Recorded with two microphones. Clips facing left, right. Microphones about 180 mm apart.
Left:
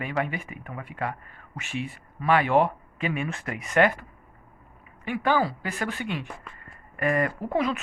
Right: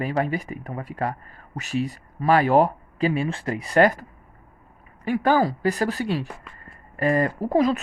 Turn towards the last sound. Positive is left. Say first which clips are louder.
# right 6 dB
turn(degrees=-35)  # may be behind; listen again after turning